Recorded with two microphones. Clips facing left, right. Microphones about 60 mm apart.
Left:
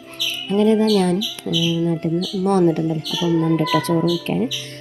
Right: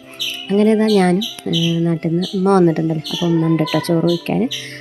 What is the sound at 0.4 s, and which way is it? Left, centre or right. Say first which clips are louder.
Speech: right 2 dB; right.